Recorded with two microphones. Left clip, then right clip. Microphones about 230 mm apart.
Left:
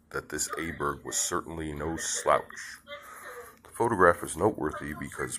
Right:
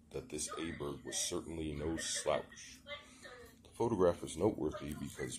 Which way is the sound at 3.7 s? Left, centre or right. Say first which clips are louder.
Left 10 dB; left.